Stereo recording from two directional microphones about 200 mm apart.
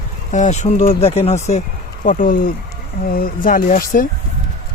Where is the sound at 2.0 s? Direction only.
45° left (ahead or behind).